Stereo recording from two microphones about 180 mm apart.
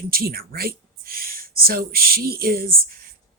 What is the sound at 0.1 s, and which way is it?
A woman's voice, 55° right (ahead or behind).